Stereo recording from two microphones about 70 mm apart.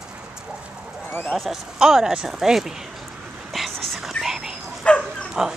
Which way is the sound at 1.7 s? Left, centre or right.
Centre.